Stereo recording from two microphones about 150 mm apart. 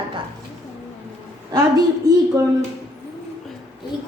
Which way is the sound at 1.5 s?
25° right (ahead or behind).